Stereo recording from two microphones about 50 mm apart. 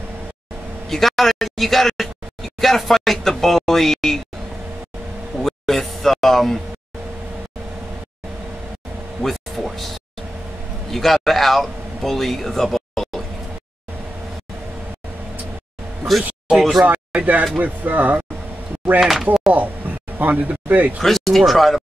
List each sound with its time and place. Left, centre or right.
0.8 s speech: centre
5.4 s a sound: centre
9.2 s a sound: centre
10.9 s speech: centre
16.1 s speech: centre
16.8 s speech: right
18.9 s speech: centre
19.5 s speech: right
21.0 s speech: centre